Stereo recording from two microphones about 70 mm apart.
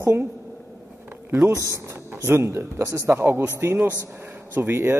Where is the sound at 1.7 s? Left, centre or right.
Right.